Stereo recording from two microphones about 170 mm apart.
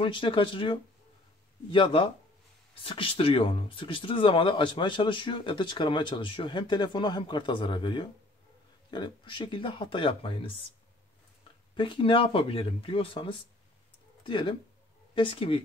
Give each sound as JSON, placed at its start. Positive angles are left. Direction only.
{"t": 0.0, "sound": "speech", "side_deg": 30}
{"t": 11.7, "sound": "speech", "side_deg": 30}